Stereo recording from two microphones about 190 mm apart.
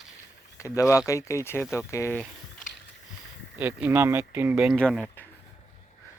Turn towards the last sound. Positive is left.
turn(degrees=5)  # may be behind; listen again after turning